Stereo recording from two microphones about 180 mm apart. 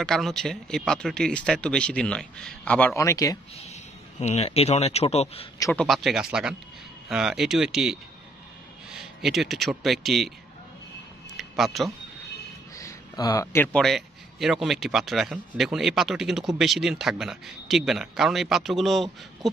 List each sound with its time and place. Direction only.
0.0 s a man's voice: centre (ahead or behind); by 3.3 s 20° left (ahead or behind)
4.2 s speech: 35° left (ahead or behind)
5.6 s a man's voice: 10° left (ahead or behind)
11.3 s a sound: centre (ahead or behind)
12.7 s a sound: 20° left (ahead or behind)
13.7 s a man's voice: centre (ahead or behind)